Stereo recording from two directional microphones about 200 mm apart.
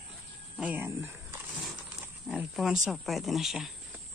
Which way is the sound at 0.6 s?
10° right (ahead or behind).